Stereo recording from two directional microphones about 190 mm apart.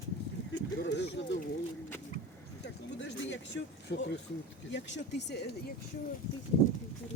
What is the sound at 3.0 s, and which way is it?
Speech, 70° left (ahead or behind).